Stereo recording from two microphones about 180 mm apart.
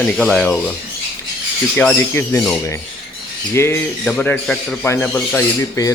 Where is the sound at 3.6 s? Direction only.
15° left (ahead or behind).